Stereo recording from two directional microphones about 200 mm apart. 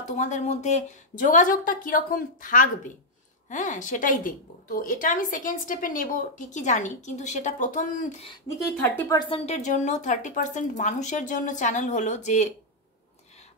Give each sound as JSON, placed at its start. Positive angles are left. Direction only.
{"t": 0.1, "sound": "a woman's voice", "side_deg": 35}
{"t": 8.3, "sound": "a woman's voice", "side_deg": 15}